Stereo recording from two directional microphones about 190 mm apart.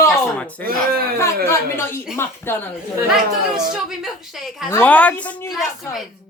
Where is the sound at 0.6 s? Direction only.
50° right (ahead or behind).